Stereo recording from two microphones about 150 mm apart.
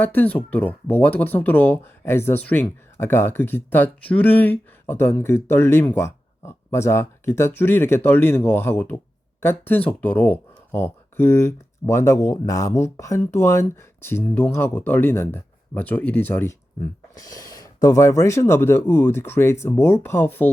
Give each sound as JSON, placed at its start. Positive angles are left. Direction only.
{"t": 0.0, "sound": "speech", "side_deg": 10}